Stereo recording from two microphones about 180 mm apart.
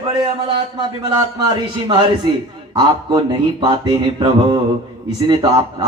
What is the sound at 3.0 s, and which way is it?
Music, 25° right (ahead or behind).